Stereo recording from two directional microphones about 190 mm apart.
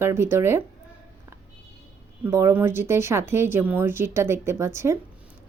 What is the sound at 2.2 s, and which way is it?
Speech, 15° right (ahead or behind).